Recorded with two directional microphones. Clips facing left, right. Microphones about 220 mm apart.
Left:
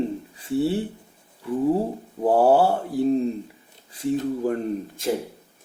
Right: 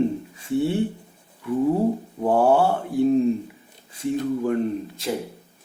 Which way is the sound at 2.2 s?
35° left (ahead or behind).